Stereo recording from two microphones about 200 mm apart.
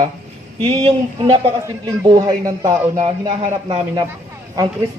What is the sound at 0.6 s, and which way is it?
Speech, 25° right (ahead or behind).